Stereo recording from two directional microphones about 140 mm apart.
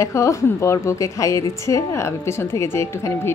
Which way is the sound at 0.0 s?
20° left (ahead or behind).